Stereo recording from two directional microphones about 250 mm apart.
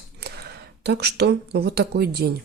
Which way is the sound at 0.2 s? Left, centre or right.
Right.